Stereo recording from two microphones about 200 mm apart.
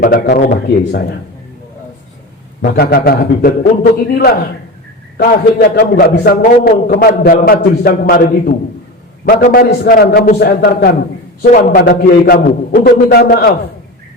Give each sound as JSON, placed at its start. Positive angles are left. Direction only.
{"t": 0.0, "sound": "a man's voice", "side_deg": 45}
{"t": 2.6, "sound": "a man's voice", "side_deg": 50}